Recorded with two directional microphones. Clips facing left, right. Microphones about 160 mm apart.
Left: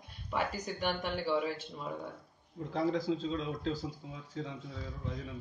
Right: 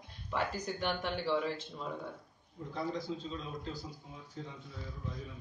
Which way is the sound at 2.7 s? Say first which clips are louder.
Left 6 dB; 90° left.